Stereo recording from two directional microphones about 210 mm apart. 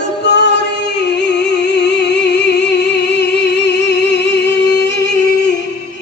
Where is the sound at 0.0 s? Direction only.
55° left (ahead or behind).